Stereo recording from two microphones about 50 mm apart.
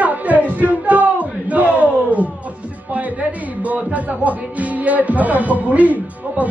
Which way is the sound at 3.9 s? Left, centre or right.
Right.